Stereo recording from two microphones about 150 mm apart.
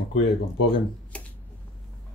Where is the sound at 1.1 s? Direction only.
10° left (ahead or behind).